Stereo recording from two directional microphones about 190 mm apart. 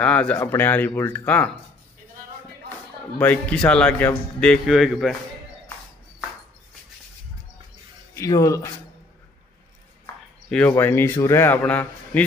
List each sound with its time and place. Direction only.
0.0 s a man's voice: 5° left (ahead or behind)
3.2 s speech: 10° left (ahead or behind)
8.1 s speech: 15° left (ahead or behind)
10.5 s a man's voice: 10° left (ahead or behind)